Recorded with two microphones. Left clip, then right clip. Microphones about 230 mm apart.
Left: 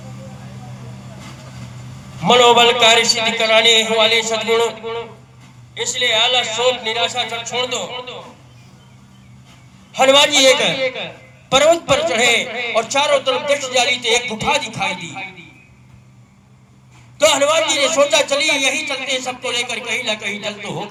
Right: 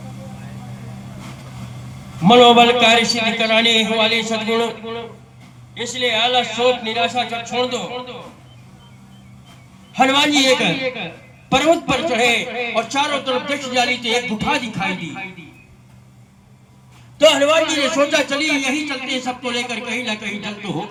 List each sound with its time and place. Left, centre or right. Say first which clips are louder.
2.2 s a man's voice: right 1 dB; left
9.9 s a man's voice: left 3 dB; left
17.2 s a man's voice: right 1 dB; centre; by 20.8 s left